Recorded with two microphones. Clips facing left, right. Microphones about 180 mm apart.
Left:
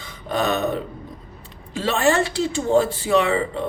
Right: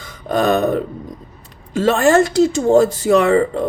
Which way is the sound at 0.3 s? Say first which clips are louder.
Right 6 dB; 45° right (ahead or behind).